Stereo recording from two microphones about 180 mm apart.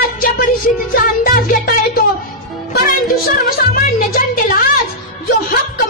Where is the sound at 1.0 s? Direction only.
50° left (ahead or behind).